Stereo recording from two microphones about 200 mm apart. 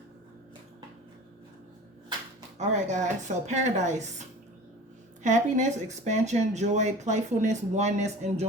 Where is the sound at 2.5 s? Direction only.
35° right (ahead or behind).